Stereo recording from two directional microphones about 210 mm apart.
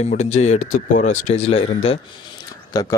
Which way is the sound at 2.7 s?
15° left (ahead or behind).